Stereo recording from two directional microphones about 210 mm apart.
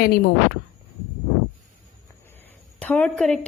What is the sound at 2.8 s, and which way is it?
Speech, 5° left (ahead or behind).